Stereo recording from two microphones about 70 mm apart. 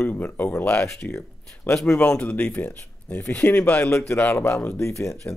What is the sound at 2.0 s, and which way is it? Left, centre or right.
A man's voice, centre.